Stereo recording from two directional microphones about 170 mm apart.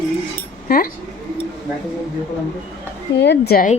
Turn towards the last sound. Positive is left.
turn(degrees=65)  # may be behind; listen again after turning